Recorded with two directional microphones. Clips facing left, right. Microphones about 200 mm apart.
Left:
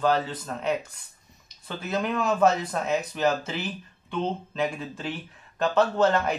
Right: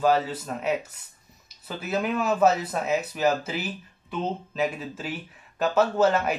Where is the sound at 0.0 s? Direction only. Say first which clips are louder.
Right 2 dB; 10° right (ahead or behind).